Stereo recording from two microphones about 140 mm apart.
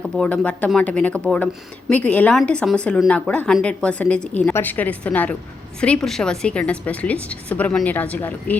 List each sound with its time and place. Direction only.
0.0 s a woman's voice: 5° left (ahead or behind)